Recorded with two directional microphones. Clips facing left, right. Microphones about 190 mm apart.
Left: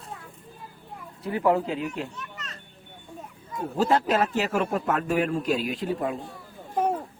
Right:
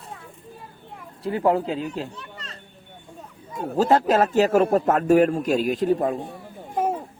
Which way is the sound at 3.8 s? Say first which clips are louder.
Right 4 dB; 45° right (ahead or behind).